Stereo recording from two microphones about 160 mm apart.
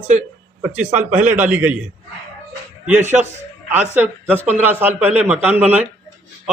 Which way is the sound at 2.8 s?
10° right (ahead or behind).